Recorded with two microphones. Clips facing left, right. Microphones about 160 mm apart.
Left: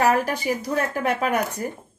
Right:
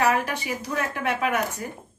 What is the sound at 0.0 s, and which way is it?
A woman's voice, 40° left (ahead or behind).